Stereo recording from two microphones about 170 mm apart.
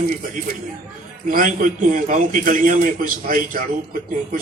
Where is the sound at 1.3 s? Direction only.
50° right (ahead or behind).